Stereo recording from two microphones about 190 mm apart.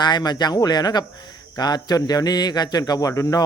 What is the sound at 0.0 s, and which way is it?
Speech, 20° left (ahead or behind).